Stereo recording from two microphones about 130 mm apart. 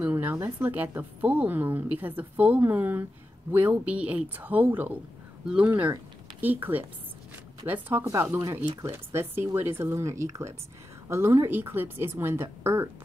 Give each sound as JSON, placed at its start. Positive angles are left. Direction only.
{"t": 0.0, "sound": "a woman's voice", "side_deg": -15}